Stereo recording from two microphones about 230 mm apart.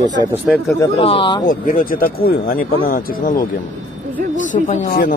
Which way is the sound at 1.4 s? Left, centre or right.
Left.